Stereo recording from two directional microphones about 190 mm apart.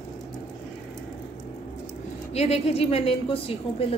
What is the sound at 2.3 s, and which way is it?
A woman's voice, 35° left (ahead or behind).